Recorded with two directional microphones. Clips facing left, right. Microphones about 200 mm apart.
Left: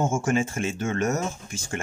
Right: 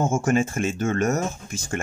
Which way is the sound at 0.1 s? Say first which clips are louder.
Right 3 dB; 45° right (ahead or behind).